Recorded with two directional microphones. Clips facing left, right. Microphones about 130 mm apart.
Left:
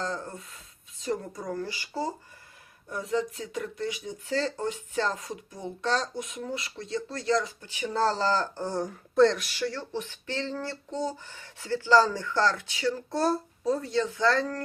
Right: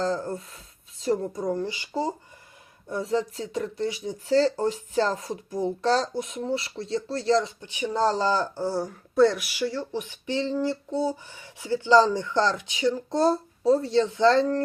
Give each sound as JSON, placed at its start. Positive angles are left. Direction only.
{"t": 0.0, "sound": "speech", "side_deg": -35}
{"t": 2.9, "sound": "speech", "side_deg": -30}